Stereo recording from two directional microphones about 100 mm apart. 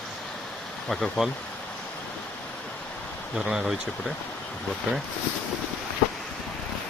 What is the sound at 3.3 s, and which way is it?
Speech, 10° right (ahead or behind).